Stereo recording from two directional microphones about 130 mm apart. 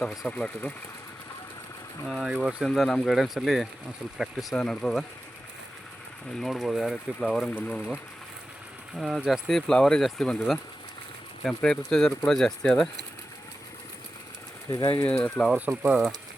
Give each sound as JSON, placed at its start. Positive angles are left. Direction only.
{"t": 0.0, "sound": "speech", "side_deg": 5}
{"t": 2.0, "sound": "speech", "side_deg": 0}
{"t": 6.4, "sound": "speech", "side_deg": 0}
{"t": 9.0, "sound": "speech", "side_deg": 0}
{"t": 14.7, "sound": "speech", "side_deg": 35}
{"t": 14.9, "sound": "speech", "side_deg": 10}
{"t": 15.7, "sound": "speech", "side_deg": -15}